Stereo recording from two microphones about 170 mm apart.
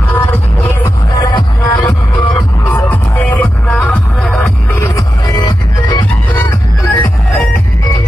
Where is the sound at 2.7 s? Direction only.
10° left (ahead or behind).